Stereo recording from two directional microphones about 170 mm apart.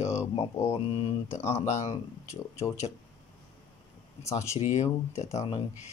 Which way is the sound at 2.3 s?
15° left (ahead or behind).